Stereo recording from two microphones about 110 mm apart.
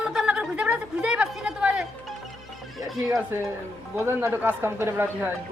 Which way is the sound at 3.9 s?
25° right (ahead or behind).